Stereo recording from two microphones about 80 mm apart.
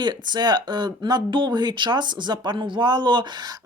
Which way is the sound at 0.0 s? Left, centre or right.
Right.